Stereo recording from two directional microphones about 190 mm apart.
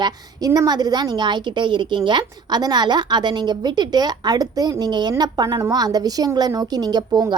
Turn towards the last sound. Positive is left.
turn(degrees=-20)  # may be behind; listen again after turning